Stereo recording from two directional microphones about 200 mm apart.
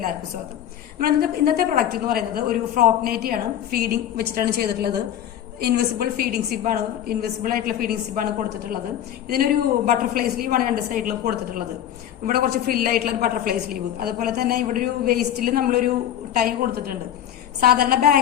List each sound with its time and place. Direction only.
0.9 s a woman's voice: 50° right (ahead or behind)
9.3 s a woman's voice: 45° right (ahead or behind)